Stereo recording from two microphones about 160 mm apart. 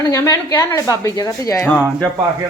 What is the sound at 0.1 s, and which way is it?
A woman's voice, 20° left (ahead or behind).